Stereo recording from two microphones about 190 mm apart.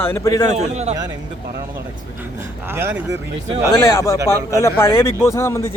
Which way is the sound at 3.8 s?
15° left (ahead or behind).